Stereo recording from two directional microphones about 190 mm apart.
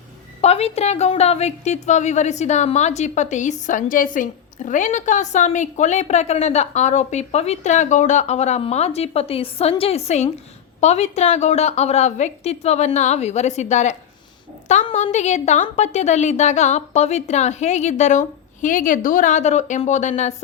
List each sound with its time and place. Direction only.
0.4 s a woman's voice: 35° left (ahead or behind)
14.9 s a woman's voice: 35° left (ahead or behind)